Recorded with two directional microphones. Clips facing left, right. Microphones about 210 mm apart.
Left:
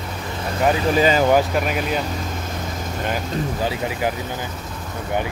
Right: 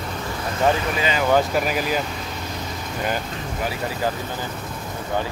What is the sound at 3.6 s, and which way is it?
Speech, 20° left (ahead or behind).